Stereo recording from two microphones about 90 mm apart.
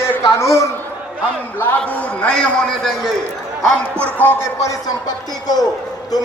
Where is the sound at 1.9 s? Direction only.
15° left (ahead or behind); by 3.1 s centre (ahead or behind).